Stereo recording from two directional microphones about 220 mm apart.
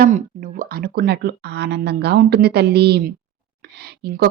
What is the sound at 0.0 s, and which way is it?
A woman's voice, 40° right (ahead or behind).